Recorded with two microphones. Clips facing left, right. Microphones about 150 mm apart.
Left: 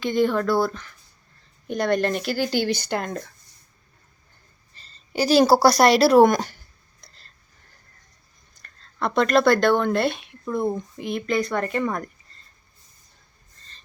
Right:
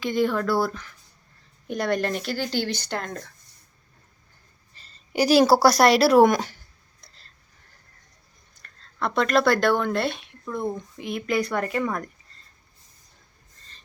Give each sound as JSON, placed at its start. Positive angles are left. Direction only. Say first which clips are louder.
{"t": 0.0, "sound": "speech", "louder": "left 2 dB", "side_deg": 0}
{"t": 4.8, "sound": "a sound", "louder": "right 1 dB", "side_deg": -10}
{"t": 5.4, "sound": "speech", "louder": "left 2 dB", "side_deg": -5}
{"t": 8.6, "sound": "speech", "louder": "left 2 dB", "side_deg": 0}